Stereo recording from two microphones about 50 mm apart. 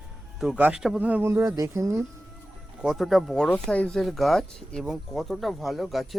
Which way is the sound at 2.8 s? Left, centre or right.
Centre.